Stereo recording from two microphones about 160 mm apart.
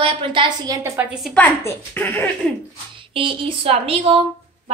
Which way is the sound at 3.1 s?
35° right (ahead or behind).